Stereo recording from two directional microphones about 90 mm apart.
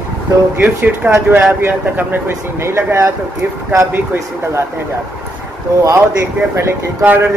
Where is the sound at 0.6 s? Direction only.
20° right (ahead or behind).